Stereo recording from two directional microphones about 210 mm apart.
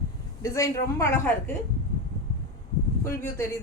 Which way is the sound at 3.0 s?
15° left (ahead or behind).